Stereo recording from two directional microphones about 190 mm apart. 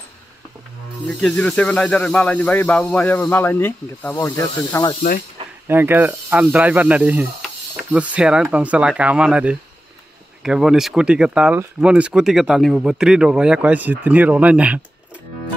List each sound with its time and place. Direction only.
1.0 s speech: 5° left (ahead or behind)
5.7 s speech: 10° right (ahead or behind)